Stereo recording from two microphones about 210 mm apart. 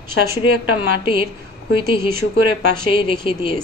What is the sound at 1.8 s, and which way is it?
Speech, 45° right (ahead or behind).